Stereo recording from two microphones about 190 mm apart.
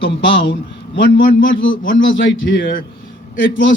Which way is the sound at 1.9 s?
75° left (ahead or behind).